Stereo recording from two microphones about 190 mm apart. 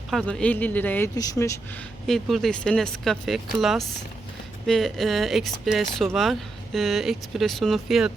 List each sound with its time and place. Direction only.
0.1 s speech: centre (ahead or behind); by 1.5 s 15° left (ahead or behind)
2.0 s speech: centre (ahead or behind)